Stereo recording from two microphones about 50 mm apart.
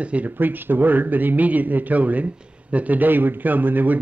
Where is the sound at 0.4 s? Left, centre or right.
Right.